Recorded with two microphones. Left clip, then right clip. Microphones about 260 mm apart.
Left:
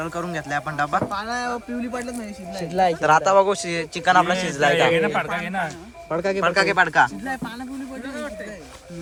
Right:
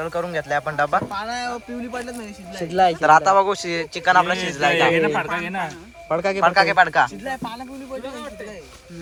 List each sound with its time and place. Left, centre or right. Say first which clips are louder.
0.0 s a man's voice: right 3 dB; centre
1.1 s speech: even; centre
2.6 s speech: right 3 dB; right
3.0 s a man's voice: right 2 dB; centre
5.2 s a man's voice: even; centre
6.1 s speech: right 2 dB; right
6.4 s a man's voice: right 3 dB; centre